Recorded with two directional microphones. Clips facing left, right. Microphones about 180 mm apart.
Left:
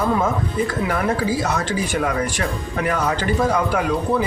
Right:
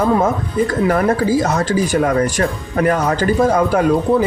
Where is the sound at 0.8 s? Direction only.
45° right (ahead or behind).